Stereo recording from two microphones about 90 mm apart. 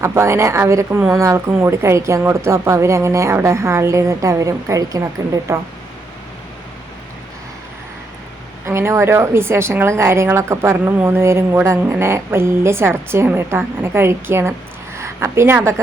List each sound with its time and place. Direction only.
0.0 s speech: 30° right (ahead or behind)
8.6 s a woman's voice: 30° right (ahead or behind)